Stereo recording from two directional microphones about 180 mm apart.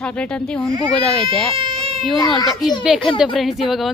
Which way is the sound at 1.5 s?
30° right (ahead or behind).